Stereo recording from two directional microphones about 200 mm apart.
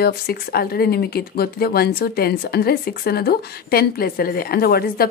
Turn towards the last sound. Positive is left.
turn(degrees=50)  # may be behind; listen again after turning